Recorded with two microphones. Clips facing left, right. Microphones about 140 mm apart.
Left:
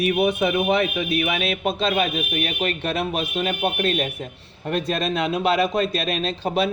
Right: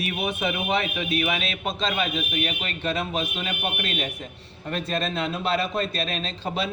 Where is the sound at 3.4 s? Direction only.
40° left (ahead or behind).